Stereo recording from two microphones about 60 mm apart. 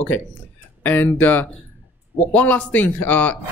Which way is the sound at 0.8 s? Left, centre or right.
Left.